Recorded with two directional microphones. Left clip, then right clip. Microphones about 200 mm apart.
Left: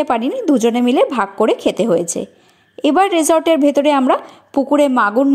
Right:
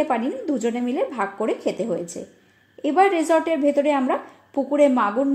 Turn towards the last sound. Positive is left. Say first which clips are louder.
# left 5 dB
turn(degrees=45)  # may be behind; listen again after turning